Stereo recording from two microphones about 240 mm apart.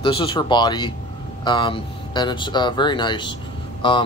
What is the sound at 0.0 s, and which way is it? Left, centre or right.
A man's voice, left.